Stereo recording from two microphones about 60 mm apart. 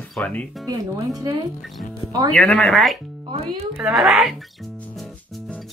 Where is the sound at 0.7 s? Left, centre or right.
Right.